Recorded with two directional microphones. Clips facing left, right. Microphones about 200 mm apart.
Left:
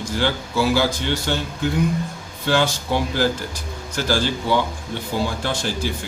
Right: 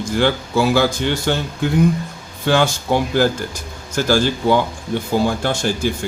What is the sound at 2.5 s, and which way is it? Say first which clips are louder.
A man's voice: right 4 dB; 50° right (ahead or behind).